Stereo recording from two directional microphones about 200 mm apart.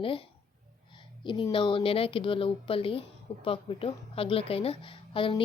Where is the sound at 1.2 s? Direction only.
25° left (ahead or behind).